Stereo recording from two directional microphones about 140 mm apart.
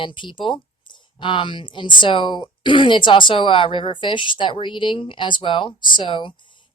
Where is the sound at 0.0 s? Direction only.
35° left (ahead or behind).